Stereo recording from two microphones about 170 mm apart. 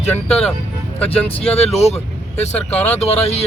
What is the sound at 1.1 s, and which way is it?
Speech, 35° left (ahead or behind).